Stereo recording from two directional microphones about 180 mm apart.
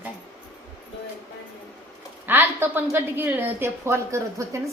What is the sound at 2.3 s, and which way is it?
A woman's voice, 10° right (ahead or behind).